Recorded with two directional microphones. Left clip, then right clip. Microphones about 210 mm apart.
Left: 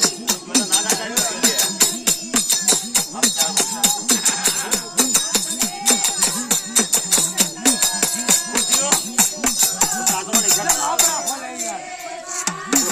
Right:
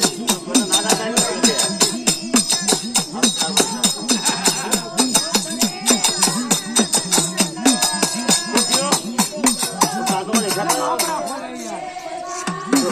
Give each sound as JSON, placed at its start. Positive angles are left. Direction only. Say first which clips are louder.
{"t": 0.0, "sound": "music", "louder": "right 1 dB", "side_deg": -30}
{"t": 9.1, "sound": "music", "louder": "right 1 dB", "side_deg": -15}
{"t": 9.8, "sound": "music", "louder": "right 2 dB", "side_deg": 0}